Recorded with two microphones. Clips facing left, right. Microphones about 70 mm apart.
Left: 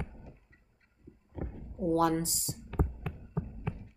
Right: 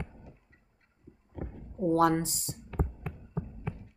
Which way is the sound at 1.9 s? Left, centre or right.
Right.